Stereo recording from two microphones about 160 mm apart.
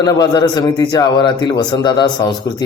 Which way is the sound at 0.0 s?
25° left (ahead or behind).